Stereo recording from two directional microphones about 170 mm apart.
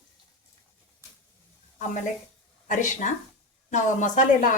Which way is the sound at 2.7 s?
45° left (ahead or behind).